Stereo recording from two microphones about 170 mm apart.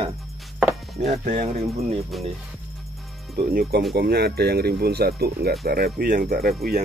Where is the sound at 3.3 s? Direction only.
75° right (ahead or behind).